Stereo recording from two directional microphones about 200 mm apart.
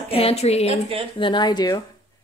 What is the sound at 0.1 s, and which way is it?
A woman's voice, 30° left (ahead or behind).